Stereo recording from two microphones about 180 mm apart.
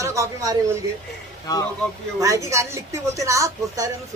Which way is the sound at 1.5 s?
20° left (ahead or behind).